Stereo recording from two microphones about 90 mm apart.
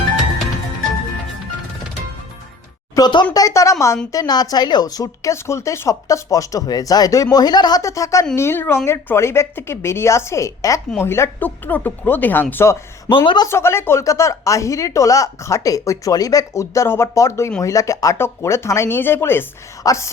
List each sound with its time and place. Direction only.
3.0 s a woman's voice: 35° left (ahead or behind)
7.8 s a woman's voice: 35° left (ahead or behind)
8.4 s speech: 25° left (ahead or behind)
13.1 s speech: 70° left (ahead or behind)
13.5 s a woman's voice: 30° left (ahead or behind)
19.8 s speech: 35° left (ahead or behind)